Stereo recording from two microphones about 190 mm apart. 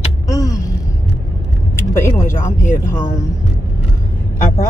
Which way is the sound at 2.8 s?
15° left (ahead or behind).